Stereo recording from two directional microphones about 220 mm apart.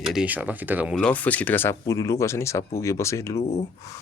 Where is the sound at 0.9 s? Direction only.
5° left (ahead or behind).